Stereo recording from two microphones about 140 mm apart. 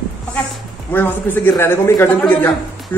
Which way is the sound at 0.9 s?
15° left (ahead or behind).